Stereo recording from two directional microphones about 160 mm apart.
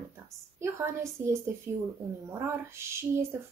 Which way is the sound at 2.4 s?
15° right (ahead or behind).